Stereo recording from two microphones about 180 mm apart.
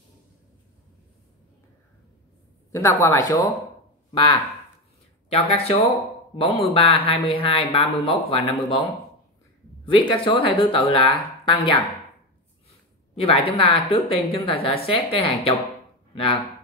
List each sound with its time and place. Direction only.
2.7 s speech: 15° left (ahead or behind); by 8.8 s 30° left (ahead or behind)
9.8 s speech: 25° left (ahead or behind)
13.1 s speech: 30° left (ahead or behind)